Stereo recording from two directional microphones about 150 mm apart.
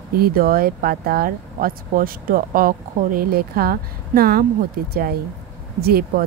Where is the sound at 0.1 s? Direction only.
80° right.